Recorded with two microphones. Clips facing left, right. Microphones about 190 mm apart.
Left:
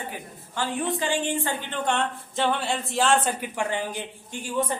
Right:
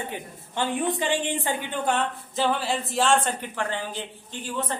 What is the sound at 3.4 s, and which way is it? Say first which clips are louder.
A woman's voice: left 2 dB; 15° left (ahead or behind).